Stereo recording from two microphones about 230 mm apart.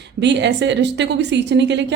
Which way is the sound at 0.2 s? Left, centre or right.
Right.